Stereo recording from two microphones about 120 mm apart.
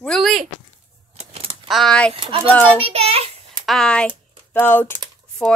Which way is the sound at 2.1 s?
45° right (ahead or behind).